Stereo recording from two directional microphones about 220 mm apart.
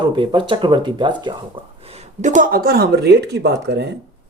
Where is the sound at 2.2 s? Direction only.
35° right (ahead or behind).